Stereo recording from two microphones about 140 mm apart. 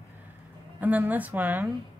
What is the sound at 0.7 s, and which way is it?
Speech, 10° right (ahead or behind).